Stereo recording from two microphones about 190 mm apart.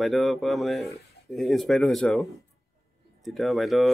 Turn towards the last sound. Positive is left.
turn(degrees=0)  # may be behind; listen again after turning